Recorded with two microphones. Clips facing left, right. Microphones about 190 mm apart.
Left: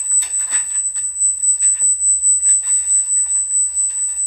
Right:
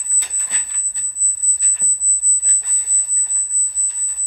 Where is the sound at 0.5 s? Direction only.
20° right (ahead or behind).